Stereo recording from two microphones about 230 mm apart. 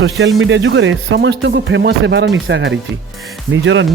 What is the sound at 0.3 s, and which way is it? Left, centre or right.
Speech, right.